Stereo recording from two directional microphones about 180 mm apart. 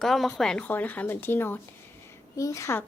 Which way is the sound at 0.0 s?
Centre (ahead or behind).